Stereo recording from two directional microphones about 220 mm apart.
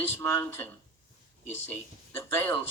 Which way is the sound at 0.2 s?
10° left (ahead or behind).